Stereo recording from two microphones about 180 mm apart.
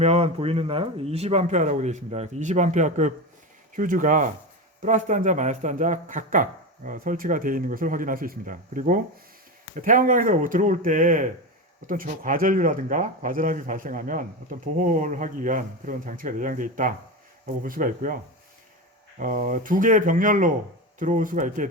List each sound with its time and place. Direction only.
0.0 s speech: 35° right (ahead or behind); by 18.2 s 50° right (ahead or behind)
19.2 s speech: 45° right (ahead or behind)